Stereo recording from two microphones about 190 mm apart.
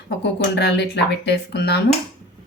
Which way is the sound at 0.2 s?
65° left (ahead or behind).